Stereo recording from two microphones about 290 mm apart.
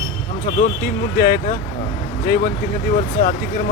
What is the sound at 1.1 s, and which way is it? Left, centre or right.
Speech, left.